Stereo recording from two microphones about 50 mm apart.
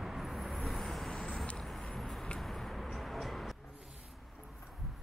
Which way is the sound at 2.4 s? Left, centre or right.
Centre.